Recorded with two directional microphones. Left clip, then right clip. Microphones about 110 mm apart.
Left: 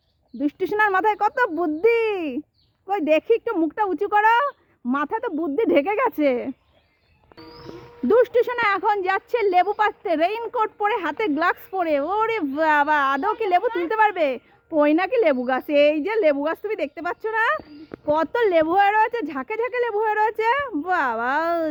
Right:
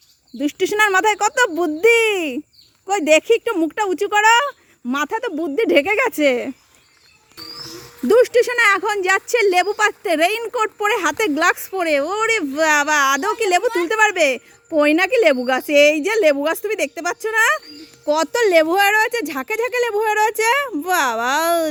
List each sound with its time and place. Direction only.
0.9 s a woman's voice: 50° right (ahead or behind)
3.4 s speech: 30° right (ahead or behind)
8.2 s a woman's voice: 55° right (ahead or behind)
10.8 s speech: 80° right
11.7 s a woman's voice: 40° right (ahead or behind); by 17.2 s 60° right (ahead or behind)
17.2 s a woman's voice: 45° right (ahead or behind)